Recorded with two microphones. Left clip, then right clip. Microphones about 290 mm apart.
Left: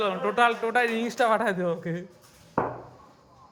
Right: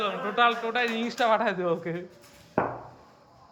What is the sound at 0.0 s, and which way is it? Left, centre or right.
A man's voice, centre.